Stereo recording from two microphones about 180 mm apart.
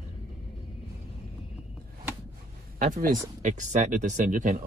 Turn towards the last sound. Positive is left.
turn(degrees=-45)  # may be behind; listen again after turning